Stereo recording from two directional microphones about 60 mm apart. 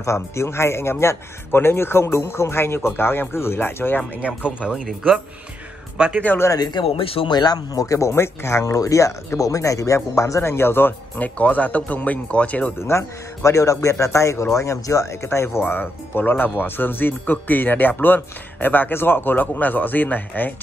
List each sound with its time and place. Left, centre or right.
0.0 s speech: left
4.4 s speech: centre
4.8 s speech: centre
5.9 s speech: centre
7.5 s speech: left
8.7 s speech: left
12.7 s speech: left
15.6 s speech: left